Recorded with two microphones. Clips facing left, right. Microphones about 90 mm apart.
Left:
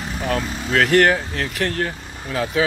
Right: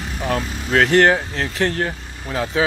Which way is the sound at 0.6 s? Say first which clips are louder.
Right 1 dB; 25° right (ahead or behind).